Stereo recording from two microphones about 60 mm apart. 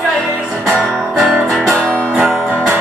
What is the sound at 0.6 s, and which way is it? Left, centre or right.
Music, centre.